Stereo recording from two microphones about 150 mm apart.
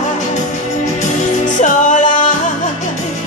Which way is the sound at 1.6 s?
55° left (ahead or behind).